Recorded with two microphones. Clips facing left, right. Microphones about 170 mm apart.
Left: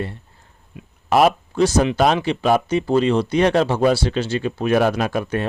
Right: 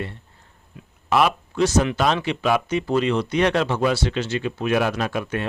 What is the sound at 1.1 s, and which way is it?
Speech, 40° left (ahead or behind).